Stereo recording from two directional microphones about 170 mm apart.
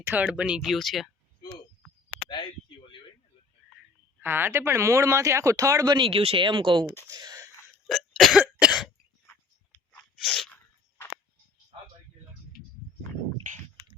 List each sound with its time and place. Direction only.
0.0 s speech: 10° right (ahead or behind)
2.1 s a sound: 30° left (ahead or behind)
4.2 s speech: 15° right (ahead or behind); by 6.8 s 30° right (ahead or behind)
7.1 s a sound: 20° right (ahead or behind)
7.9 s cough: centre (ahead or behind)
10.2 s sneeze: centre (ahead or behind)